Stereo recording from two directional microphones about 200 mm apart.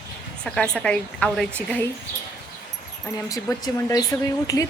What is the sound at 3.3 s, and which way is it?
Speech, 15° left (ahead or behind).